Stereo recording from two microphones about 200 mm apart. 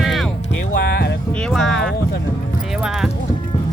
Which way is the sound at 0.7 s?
50° left (ahead or behind).